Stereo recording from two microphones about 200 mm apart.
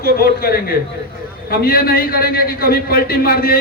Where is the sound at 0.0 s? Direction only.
50° left (ahead or behind).